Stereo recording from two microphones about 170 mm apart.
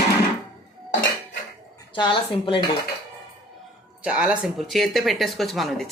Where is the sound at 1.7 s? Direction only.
25° left (ahead or behind).